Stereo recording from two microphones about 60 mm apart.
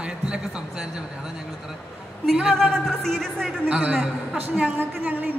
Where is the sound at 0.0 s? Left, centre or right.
Centre.